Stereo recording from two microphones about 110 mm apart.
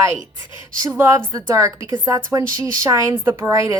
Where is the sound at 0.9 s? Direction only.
25° right (ahead or behind).